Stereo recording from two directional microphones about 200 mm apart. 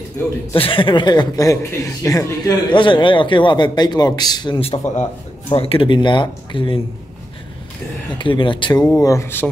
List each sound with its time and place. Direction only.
0.2 s speech: 10° left (ahead or behind)
0.5 s a man's voice: 25° left (ahead or behind)
8.2 s a man's voice: 25° left (ahead or behind)